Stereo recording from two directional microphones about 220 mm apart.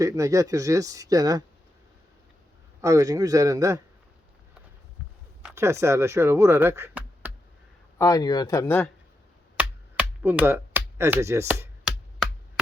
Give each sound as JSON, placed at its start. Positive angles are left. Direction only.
{"t": 0.0, "sound": "speech", "side_deg": -15}
{"t": 2.8, "sound": "speech", "side_deg": -15}
{"t": 5.5, "sound": "speech", "side_deg": -15}
{"t": 7.9, "sound": "speech", "side_deg": 15}
{"t": 9.6, "sound": "music", "side_deg": -5}